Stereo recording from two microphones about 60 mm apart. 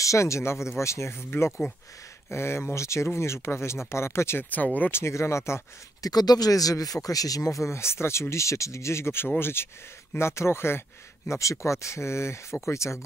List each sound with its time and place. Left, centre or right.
0.0 s speech: left
2.3 s speech: left
6.0 s speech: left
11.2 s speech: left